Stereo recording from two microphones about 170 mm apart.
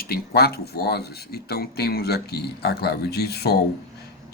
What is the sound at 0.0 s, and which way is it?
Speech, 65° left (ahead or behind).